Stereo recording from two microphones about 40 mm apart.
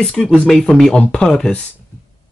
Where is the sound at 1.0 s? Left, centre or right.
Left.